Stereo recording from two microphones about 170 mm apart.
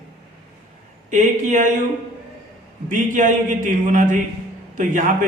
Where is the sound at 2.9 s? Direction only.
50° right (ahead or behind).